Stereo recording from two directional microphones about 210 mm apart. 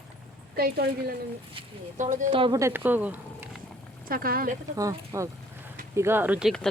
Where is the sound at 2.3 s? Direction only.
20° right (ahead or behind).